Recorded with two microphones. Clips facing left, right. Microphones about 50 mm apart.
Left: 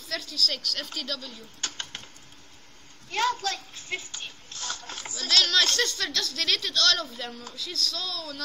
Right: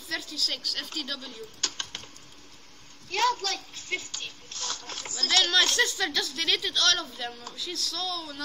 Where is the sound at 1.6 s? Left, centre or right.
Left.